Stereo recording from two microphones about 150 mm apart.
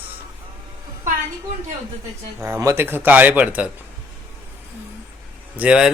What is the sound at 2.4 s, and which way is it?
Speech, 20° right (ahead or behind).